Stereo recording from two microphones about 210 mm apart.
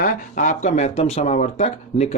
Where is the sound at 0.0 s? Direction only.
40° left (ahead or behind).